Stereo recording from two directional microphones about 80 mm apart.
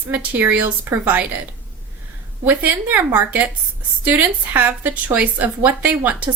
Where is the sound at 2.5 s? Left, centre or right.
Right.